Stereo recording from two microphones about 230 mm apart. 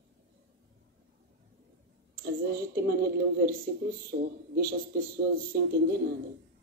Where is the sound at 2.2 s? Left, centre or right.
Right.